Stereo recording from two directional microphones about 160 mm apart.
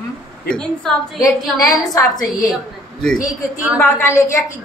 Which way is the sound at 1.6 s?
20° left (ahead or behind).